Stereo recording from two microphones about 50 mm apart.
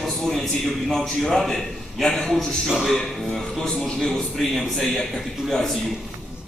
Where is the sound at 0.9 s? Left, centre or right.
Centre.